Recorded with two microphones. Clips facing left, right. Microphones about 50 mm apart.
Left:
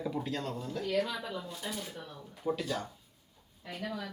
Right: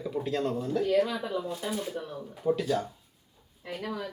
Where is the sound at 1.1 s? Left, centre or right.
Right.